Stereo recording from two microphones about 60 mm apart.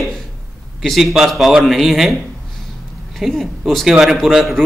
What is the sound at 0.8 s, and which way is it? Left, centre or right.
A man's voice, centre.